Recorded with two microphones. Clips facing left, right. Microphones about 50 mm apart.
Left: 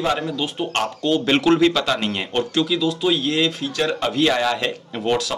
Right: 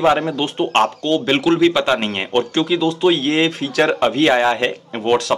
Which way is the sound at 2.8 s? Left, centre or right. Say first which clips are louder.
Right 4 dB; right.